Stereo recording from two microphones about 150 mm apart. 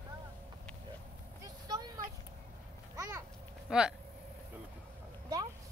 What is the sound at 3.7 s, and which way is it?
Speech, 5° right (ahead or behind).